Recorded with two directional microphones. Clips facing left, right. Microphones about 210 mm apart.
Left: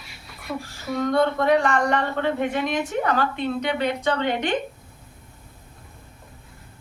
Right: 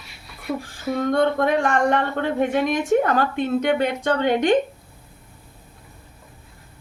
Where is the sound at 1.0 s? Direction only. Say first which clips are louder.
Even; 50° right (ahead or behind).